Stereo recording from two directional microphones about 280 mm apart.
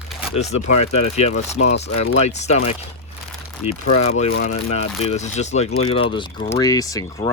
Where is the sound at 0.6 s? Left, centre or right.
Left.